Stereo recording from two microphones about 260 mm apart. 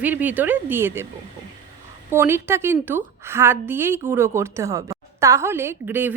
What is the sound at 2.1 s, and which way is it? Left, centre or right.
A woman's voice, centre.